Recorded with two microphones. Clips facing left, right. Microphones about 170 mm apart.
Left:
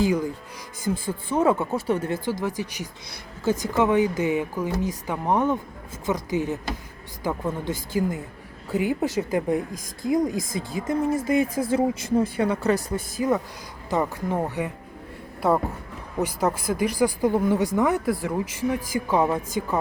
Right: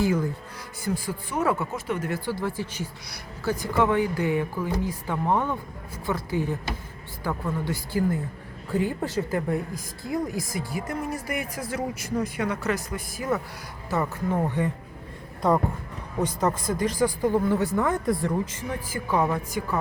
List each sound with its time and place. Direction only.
0.0 s a woman's voice: 15° left (ahead or behind)
1.0 s speech: 25° left (ahead or behind)
13.1 s a woman's voice: 20° left (ahead or behind)